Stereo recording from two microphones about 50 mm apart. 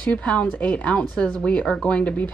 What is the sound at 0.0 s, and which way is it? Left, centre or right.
A woman's voice, left.